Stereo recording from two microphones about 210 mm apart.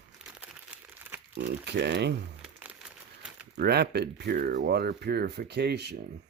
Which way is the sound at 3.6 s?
50° right (ahead or behind).